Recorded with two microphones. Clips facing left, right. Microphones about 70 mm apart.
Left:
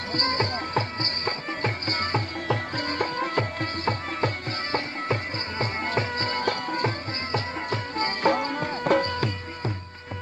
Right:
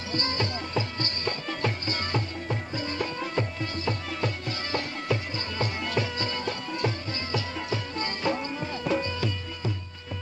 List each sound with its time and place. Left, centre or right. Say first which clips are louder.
0.1 s music: left 3 dB; left
2.4 s music: left 4 dB; left
4.7 s music: left 1 dB; left